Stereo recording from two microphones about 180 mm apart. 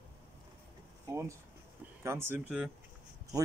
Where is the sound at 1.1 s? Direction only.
15° right (ahead or behind).